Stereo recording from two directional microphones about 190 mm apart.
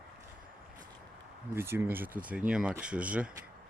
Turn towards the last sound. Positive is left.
turn(degrees=-5)  # may be behind; listen again after turning